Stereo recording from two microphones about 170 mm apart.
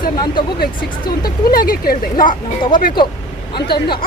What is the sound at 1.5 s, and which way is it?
Speech, 60° left (ahead or behind).